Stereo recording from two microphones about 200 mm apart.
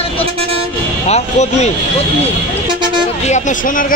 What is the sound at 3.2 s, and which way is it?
Speech, 35° left (ahead or behind).